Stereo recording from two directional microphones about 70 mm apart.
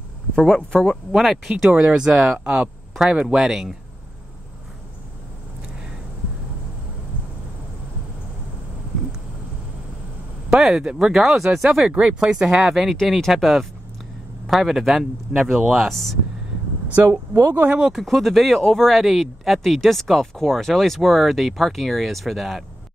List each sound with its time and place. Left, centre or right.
0.6 s speech: centre
0.8 s speech: centre
1.9 s speech: centre
10.5 s speech: centre
17.5 s speech: right
17.7 s speech: centre
18.0 s speech: centre